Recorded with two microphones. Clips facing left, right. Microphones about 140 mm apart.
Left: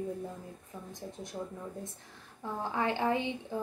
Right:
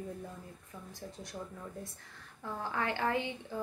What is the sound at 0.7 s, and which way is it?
A woman's voice, 20° left (ahead or behind).